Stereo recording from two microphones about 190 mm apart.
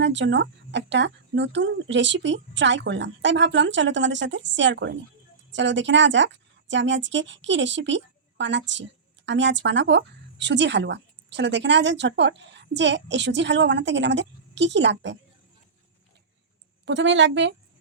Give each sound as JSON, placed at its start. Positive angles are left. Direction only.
{"t": 0.0, "sound": "speech", "side_deg": -70}
{"t": 16.8, "sound": "speech", "side_deg": -75}